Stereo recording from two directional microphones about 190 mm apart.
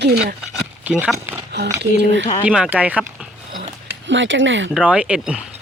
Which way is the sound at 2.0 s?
70° right (ahead or behind).